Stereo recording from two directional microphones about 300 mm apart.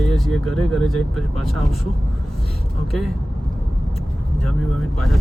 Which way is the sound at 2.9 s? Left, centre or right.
Centre.